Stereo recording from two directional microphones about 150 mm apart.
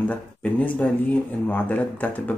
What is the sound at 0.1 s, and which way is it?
Speech, 10° left (ahead or behind).